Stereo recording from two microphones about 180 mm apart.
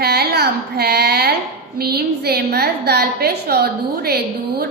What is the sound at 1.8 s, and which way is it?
A woman's voice, 60° right (ahead or behind).